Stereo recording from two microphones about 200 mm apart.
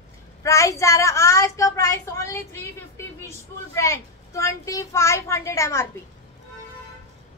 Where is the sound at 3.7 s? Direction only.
15° left (ahead or behind).